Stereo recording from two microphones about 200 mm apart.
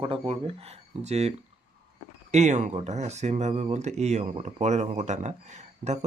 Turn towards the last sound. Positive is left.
turn(degrees=-35)  # may be behind; listen again after turning